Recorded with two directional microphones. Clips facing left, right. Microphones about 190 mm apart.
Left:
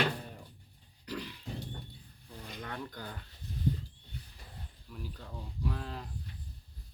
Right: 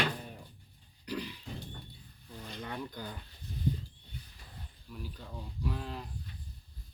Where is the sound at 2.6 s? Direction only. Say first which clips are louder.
Right 2 dB; 15° right (ahead or behind).